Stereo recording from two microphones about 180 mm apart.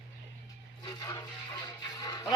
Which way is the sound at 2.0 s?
20° left (ahead or behind).